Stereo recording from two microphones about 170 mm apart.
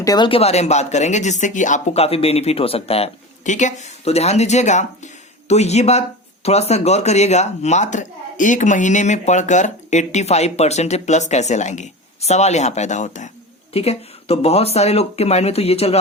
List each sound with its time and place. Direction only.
0.0 s speech: 25° left (ahead or behind)